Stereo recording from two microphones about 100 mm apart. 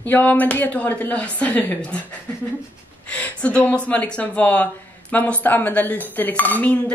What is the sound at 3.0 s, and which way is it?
Speech, 15° left (ahead or behind).